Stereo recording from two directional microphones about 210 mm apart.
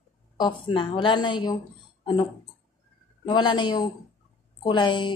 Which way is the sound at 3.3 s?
20° left (ahead or behind).